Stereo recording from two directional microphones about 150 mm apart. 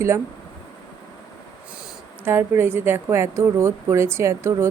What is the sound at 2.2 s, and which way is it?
A woman's voice, 15° right (ahead or behind).